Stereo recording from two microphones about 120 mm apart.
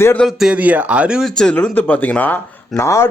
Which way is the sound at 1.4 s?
5° left (ahead or behind).